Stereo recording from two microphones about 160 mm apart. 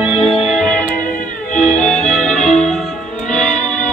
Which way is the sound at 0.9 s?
55° left (ahead or behind).